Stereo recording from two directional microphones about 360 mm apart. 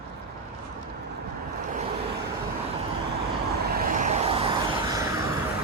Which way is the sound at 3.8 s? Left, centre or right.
Centre.